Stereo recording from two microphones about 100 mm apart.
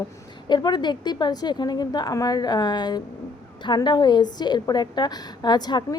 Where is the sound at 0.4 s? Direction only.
50° left (ahead or behind).